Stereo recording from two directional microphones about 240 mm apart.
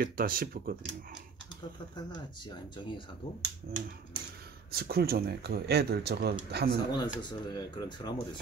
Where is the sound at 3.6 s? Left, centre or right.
Right.